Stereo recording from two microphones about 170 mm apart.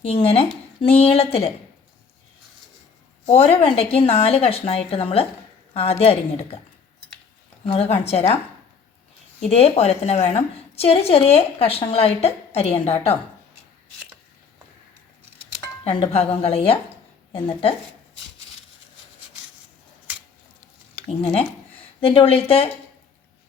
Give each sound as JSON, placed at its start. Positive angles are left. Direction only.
{"t": 0.0, "sound": "a woman's voice", "side_deg": 35}
{"t": 3.2, "sound": "a woman's voice", "side_deg": 35}
{"t": 7.6, "sound": "speech", "side_deg": 35}
{"t": 9.5, "sound": "a woman's voice", "side_deg": 35}
{"t": 15.8, "sound": "a woman's voice", "side_deg": 30}
{"t": 21.1, "sound": "a woman's voice", "side_deg": 35}